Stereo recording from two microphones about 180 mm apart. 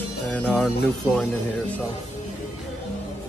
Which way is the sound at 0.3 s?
10° left (ahead or behind).